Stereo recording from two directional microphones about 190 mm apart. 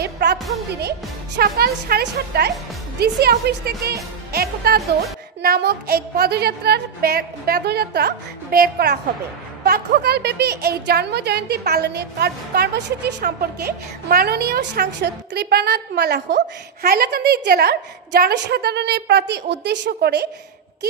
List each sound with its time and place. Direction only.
0.0 s music: 60° right (ahead or behind)
0.7 s a woman's voice: 60° right (ahead or behind)